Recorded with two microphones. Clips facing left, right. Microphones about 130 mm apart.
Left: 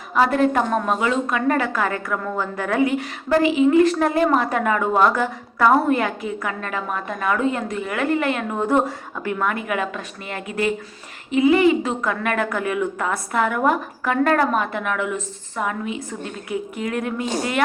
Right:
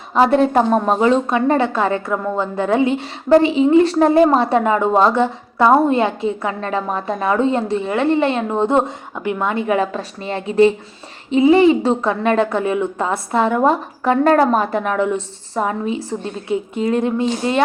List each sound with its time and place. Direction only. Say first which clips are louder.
0.1 s a woman's voice: right 4 dB; 30° right (ahead or behind)